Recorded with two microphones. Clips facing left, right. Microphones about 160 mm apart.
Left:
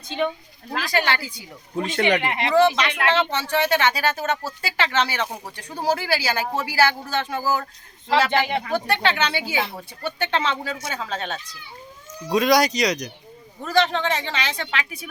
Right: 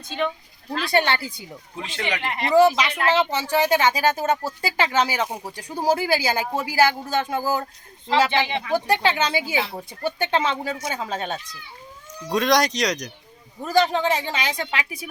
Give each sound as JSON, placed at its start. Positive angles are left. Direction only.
{"t": 0.7, "sound": "speech", "side_deg": -25}
{"t": 1.7, "sound": "speech", "side_deg": 50}
{"t": 2.5, "sound": "speech", "side_deg": -10}
{"t": 12.3, "sound": "speech", "side_deg": 5}
{"t": 13.6, "sound": "speech", "side_deg": -10}